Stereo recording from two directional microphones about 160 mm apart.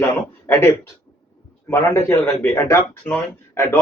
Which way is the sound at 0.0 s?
15° left (ahead or behind).